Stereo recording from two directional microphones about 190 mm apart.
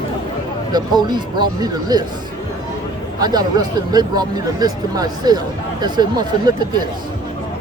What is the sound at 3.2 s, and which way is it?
Speech, 20° right (ahead or behind).